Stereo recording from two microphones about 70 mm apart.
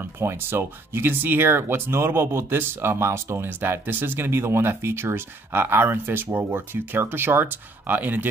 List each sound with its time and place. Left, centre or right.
0.0 s speech: right